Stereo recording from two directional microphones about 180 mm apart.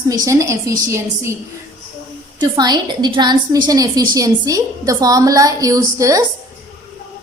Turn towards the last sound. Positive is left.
turn(degrees=-20)  # may be behind; listen again after turning